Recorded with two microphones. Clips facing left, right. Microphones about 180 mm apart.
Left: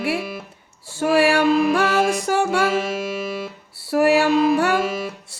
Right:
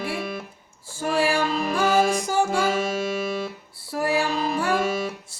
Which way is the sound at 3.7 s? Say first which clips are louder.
Left 8 dB; 75° left (ahead or behind).